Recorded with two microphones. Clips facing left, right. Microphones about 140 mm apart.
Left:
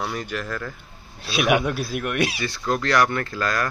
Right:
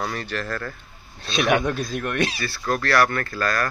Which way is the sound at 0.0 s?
10° left (ahead or behind).